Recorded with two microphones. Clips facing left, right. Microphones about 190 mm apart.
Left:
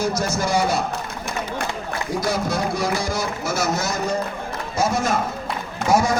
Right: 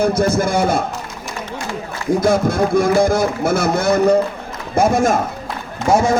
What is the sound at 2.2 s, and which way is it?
A man's voice, 50° right (ahead or behind).